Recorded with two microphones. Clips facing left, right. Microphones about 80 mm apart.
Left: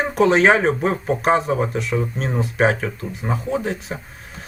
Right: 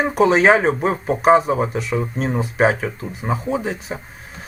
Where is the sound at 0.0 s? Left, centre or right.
Centre.